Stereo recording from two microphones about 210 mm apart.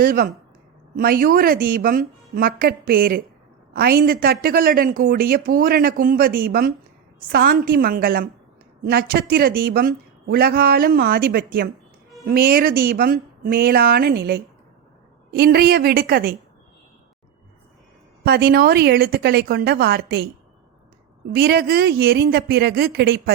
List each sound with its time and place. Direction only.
0.0 s a woman's voice: 45° right (ahead or behind)
18.3 s a woman's voice: 45° right (ahead or behind)
21.3 s a woman's voice: 50° right (ahead or behind)